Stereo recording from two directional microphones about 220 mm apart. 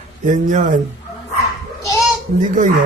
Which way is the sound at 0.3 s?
35° right (ahead or behind).